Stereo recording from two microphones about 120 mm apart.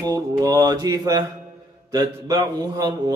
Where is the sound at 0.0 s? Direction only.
30° right (ahead or behind).